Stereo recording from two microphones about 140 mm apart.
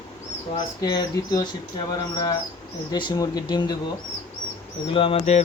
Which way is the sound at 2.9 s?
30° left (ahead or behind).